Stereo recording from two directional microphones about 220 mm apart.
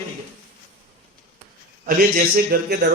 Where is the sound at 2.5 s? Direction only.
50° right (ahead or behind).